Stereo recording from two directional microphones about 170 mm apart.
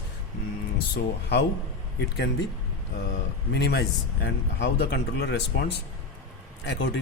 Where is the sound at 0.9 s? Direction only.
80° left.